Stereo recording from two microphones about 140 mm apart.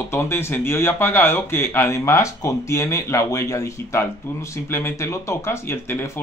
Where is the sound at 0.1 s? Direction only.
15° left (ahead or behind).